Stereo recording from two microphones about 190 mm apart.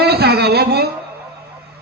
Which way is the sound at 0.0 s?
60° right (ahead or behind).